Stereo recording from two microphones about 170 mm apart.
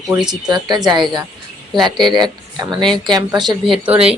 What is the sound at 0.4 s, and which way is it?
Speech, 25° right (ahead or behind).